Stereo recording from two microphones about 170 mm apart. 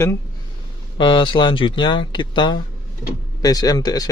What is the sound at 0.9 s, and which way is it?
Speech, 30° left (ahead or behind).